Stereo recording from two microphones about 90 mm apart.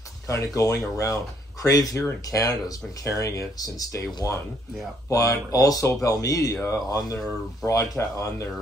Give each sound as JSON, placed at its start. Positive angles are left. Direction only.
{"t": 0.3, "sound": "speech", "side_deg": 35}